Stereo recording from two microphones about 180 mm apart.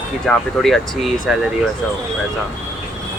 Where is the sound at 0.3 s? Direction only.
Centre (ahead or behind).